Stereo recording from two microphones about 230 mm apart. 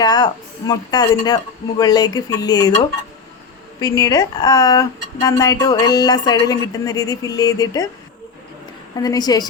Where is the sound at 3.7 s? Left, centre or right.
Centre.